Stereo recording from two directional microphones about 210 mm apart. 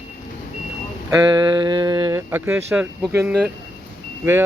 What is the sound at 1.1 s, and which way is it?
Speech, 20° right (ahead or behind).